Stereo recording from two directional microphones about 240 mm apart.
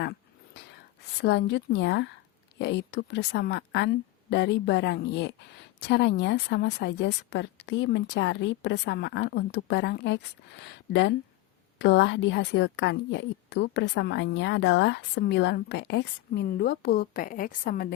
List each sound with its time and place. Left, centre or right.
1.2 s a woman's voice: left